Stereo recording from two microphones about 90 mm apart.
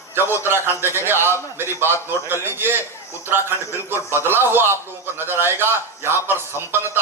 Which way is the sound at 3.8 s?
25° right (ahead or behind).